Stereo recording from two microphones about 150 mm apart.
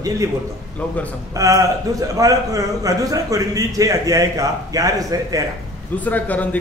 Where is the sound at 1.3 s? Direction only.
20° right (ahead or behind).